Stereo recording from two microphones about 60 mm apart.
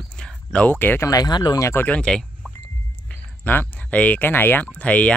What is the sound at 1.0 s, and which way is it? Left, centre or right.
Speech, left.